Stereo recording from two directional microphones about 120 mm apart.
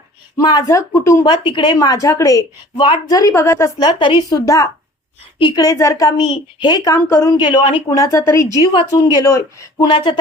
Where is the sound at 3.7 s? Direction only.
40° left (ahead or behind).